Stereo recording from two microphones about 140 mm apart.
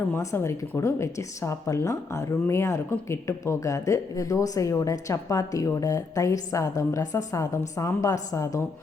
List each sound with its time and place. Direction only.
0.1 s speech: 20° left (ahead or behind)